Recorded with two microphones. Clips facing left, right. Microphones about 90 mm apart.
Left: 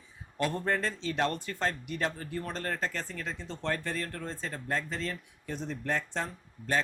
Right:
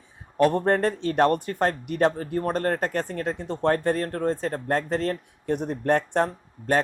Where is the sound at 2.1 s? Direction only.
40° right (ahead or behind).